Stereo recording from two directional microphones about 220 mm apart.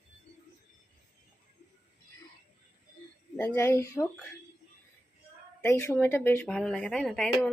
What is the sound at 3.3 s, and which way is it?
Speech, 10° left (ahead or behind).